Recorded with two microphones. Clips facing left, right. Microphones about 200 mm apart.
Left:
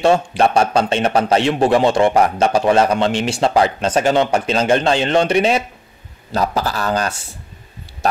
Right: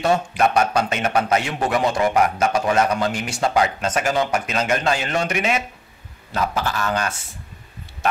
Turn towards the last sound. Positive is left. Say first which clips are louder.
# left 3 dB
turn(degrees=35)  # may be behind; listen again after turning